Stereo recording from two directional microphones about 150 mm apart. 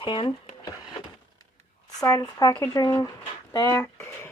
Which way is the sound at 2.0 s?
25° left (ahead or behind).